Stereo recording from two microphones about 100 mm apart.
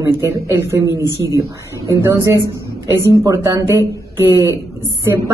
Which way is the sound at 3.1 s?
35° right (ahead or behind).